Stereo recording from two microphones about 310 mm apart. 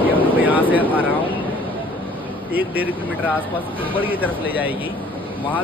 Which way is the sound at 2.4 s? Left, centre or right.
Centre.